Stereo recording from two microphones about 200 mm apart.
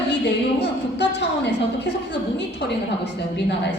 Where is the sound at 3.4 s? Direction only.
60° left (ahead or behind).